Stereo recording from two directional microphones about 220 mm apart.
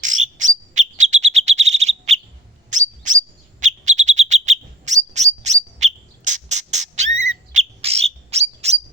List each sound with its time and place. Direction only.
0.0 s bird: 35° right (ahead or behind)